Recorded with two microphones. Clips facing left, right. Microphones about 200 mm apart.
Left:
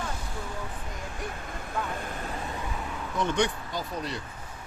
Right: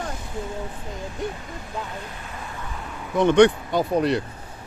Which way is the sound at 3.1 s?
65° right (ahead or behind).